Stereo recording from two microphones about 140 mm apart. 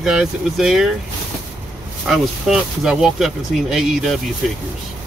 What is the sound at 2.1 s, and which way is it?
Speech, centre (ahead or behind).